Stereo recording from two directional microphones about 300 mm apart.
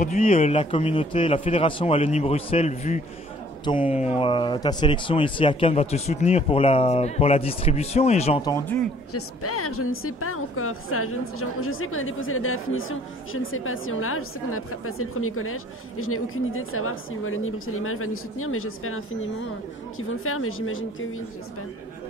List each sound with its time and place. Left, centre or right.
0.0 s speech: left
9.1 s a woman's voice: left